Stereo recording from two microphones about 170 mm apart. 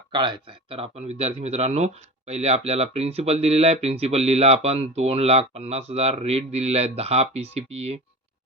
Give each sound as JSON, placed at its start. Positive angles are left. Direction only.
{"t": 0.1, "sound": "speech", "side_deg": -25}